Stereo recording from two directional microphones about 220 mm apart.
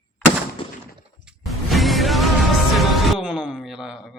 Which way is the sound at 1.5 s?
Centre (ahead or behind).